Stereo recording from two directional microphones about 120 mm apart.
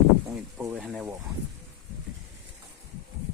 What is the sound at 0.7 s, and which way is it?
Speech, centre (ahead or behind).